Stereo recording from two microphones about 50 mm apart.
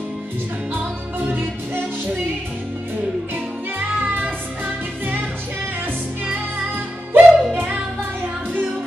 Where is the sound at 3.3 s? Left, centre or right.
Right.